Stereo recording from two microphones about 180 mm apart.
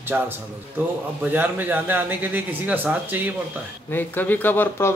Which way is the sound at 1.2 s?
10° right (ahead or behind).